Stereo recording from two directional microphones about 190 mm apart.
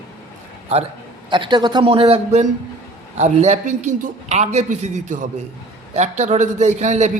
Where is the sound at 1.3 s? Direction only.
25° right (ahead or behind).